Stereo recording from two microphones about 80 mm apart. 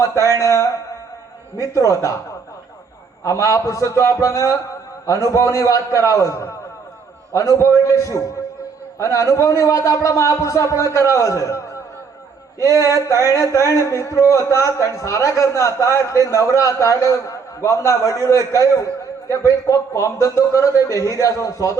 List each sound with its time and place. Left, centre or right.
0.0 s a man's voice: left
3.2 s speech: left